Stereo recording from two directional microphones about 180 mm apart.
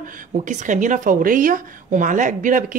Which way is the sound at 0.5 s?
45° right (ahead or behind).